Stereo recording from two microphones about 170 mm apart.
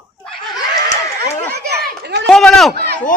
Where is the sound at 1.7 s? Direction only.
80° right.